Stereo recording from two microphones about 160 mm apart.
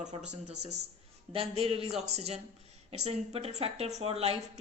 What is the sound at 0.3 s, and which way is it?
A woman's voice, 45° right (ahead or behind).